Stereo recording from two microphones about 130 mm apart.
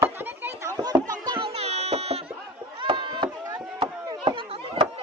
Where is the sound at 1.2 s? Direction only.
40° right (ahead or behind).